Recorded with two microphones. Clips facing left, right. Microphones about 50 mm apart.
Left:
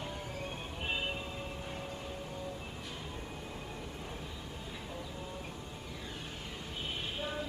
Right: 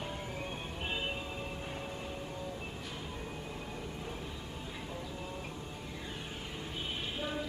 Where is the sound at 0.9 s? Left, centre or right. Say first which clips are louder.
Left 1 dB; centre.